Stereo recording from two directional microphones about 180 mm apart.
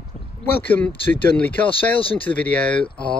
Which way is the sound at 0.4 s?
10° left (ahead or behind).